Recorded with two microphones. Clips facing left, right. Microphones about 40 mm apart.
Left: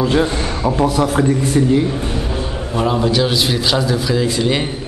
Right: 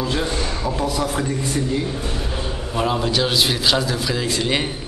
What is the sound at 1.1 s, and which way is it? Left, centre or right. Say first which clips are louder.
Speech: left 8 dB; left.